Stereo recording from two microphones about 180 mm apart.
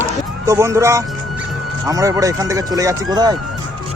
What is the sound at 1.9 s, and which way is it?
Speech, 20° right (ahead or behind).